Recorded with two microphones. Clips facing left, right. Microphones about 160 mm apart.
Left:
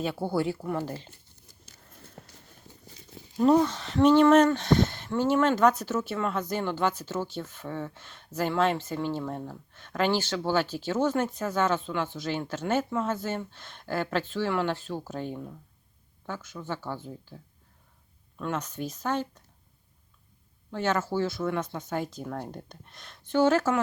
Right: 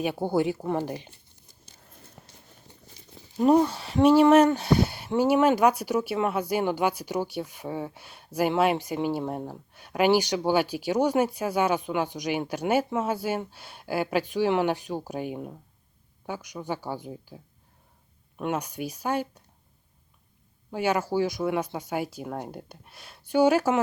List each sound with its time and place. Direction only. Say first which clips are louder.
0.0 s speech: right 3 dB; 15° right (ahead or behind)
3.3 s speech: right 1 dB; 15° right (ahead or behind)
20.7 s speech: right 2 dB; 10° right (ahead or behind)